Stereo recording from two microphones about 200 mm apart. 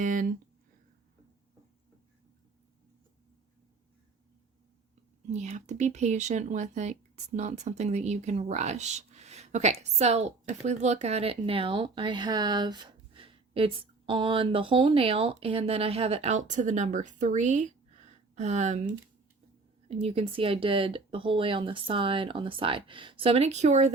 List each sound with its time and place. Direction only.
0.0 s speech: 40° right (ahead or behind)
5.3 s a woman's voice: 35° right (ahead or behind)